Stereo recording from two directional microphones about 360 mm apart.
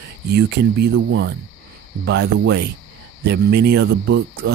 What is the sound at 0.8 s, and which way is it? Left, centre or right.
Speech, right.